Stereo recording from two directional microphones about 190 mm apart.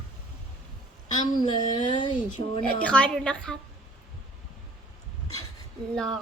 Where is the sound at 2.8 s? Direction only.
5° left (ahead or behind).